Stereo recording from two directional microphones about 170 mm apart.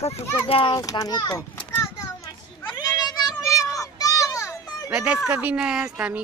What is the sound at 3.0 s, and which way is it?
Children playing, 25° left (ahead or behind).